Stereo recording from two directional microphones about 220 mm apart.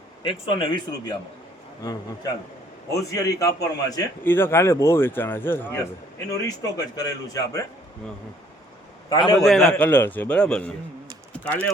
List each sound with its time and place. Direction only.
0.2 s a man's voice: 20° left (ahead or behind)
9.0 s a man's voice: 15° left (ahead or behind)